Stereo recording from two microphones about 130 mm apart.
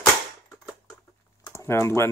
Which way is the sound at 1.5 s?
20° left (ahead or behind).